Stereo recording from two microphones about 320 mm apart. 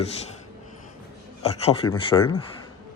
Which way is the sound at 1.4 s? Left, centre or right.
Centre.